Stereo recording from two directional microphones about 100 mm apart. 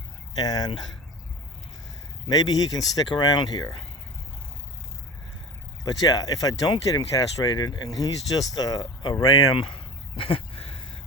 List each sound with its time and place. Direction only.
0.3 s speech: 40° left (ahead or behind)
2.3 s speech: 40° left (ahead or behind)
5.8 s speech: 35° left (ahead or behind)
9.6 s a sound: 60° left (ahead or behind)